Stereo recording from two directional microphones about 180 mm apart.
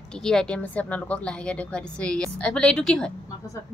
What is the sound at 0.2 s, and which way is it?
A woman's voice, 5° left (ahead or behind).